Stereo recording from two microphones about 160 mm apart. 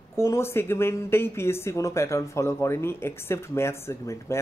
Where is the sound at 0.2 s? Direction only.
15° left (ahead or behind).